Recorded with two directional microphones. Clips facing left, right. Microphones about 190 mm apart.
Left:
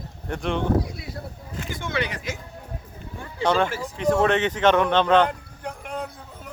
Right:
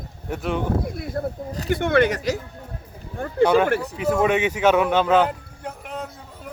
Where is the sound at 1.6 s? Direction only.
60° right (ahead or behind); by 2.4 s 40° right (ahead or behind).